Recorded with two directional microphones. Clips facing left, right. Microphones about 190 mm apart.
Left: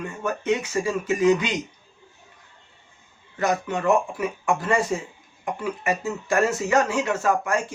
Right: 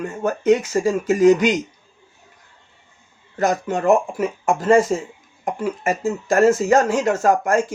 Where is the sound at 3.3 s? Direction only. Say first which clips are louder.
Right 4 dB; 45° right (ahead or behind).